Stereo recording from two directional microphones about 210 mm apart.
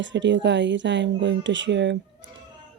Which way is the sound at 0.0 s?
60° right (ahead or behind).